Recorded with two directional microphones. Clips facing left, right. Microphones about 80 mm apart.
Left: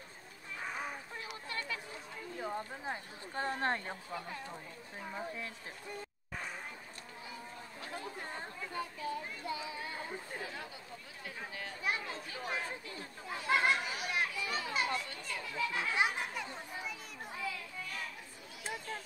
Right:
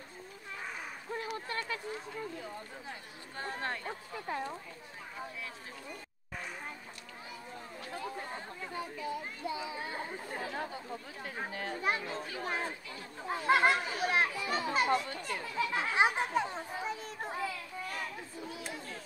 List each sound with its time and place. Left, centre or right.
1.2 s a sound: right
2.4 s speech: left
3.8 s speech: right
8.7 s speech: right
10.5 s speech: right
13.3 s children playing: right